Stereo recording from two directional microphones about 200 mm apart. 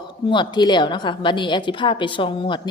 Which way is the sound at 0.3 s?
20° left (ahead or behind).